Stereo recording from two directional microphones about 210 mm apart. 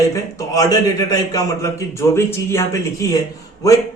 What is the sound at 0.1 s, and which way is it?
A man's voice, 15° left (ahead or behind).